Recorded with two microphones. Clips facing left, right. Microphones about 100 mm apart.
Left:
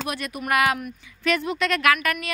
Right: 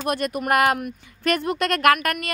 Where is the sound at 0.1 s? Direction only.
45° right (ahead or behind).